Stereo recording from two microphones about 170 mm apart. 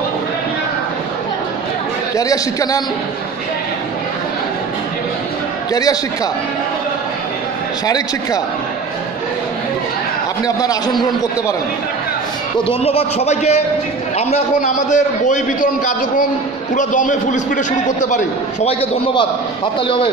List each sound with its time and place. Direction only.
2.1 s a man's voice: 20° left (ahead or behind)
5.7 s a man's voice: 20° left (ahead or behind)
7.8 s a man's voice: 20° left (ahead or behind)
10.4 s a man's voice: 20° left (ahead or behind)
12.6 s a man's voice: 35° left (ahead or behind)